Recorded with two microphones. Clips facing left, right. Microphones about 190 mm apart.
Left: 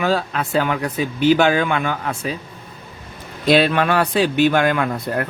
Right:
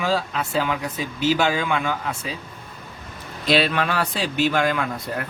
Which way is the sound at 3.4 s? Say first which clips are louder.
Left 5 dB; 50° left (ahead or behind).